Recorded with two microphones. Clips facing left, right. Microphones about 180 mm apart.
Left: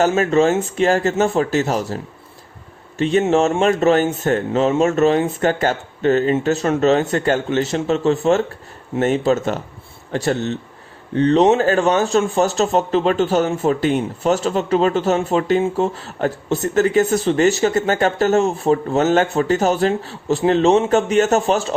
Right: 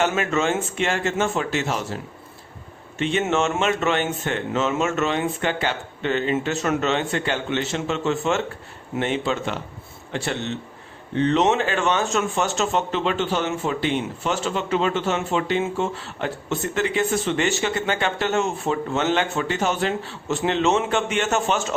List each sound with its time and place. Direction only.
0.0 s speech: 35° left (ahead or behind)
3.0 s speech: 40° left (ahead or behind)